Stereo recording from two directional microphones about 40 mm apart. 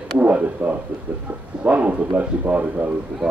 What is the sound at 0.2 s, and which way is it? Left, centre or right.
Speech, right.